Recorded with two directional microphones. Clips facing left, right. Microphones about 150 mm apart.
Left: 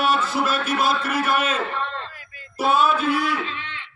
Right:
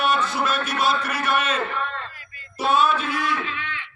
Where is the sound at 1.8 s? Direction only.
30° left (ahead or behind).